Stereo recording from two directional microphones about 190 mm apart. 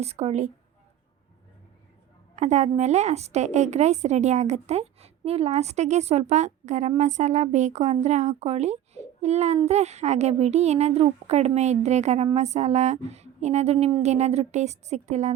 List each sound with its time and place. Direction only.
0.0 s a woman's voice: 35° right (ahead or behind)
2.3 s a woman's voice: 35° right (ahead or behind)